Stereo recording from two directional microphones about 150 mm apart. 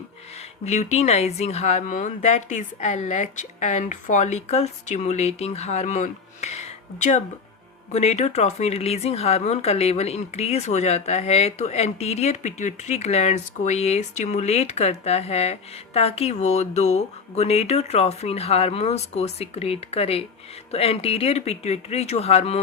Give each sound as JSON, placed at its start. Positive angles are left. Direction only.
{"t": 0.6, "sound": "speech", "side_deg": 45}